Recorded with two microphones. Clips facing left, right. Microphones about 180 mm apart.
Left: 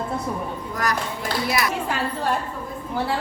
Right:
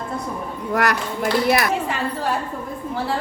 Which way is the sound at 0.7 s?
65° right (ahead or behind).